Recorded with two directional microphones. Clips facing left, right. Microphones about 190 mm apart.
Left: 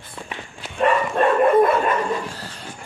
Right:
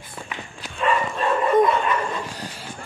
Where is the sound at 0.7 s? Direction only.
60° left (ahead or behind).